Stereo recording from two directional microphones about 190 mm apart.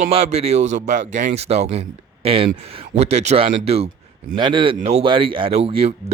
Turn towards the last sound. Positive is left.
turn(degrees=-30)  # may be behind; listen again after turning